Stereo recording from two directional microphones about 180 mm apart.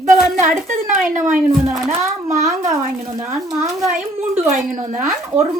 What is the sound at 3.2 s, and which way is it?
Speech, 15° right (ahead or behind).